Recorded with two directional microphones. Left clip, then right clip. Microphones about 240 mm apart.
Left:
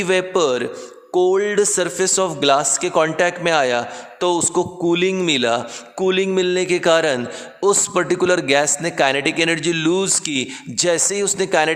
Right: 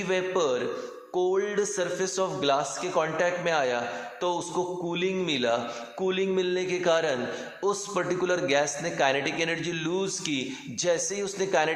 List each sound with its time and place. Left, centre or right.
0.0 s a man's voice: left